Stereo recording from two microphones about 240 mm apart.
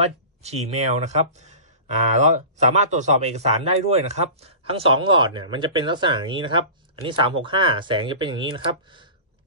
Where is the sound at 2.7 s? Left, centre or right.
Right.